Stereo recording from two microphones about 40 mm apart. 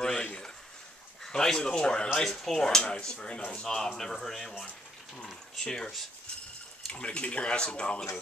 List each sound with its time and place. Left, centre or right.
1.3 s speech: centre
2.2 s speech: centre
2.8 s speech: left
3.6 s speech: centre
6.9 s speech: left